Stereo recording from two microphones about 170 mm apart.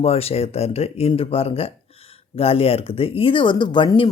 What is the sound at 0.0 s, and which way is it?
Speech, 35° left (ahead or behind).